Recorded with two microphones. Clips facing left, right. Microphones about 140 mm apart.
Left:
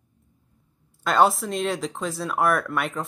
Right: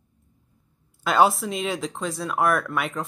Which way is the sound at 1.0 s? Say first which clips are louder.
Even; 5° right (ahead or behind).